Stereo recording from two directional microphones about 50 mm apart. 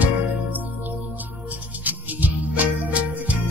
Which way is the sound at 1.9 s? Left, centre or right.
Right.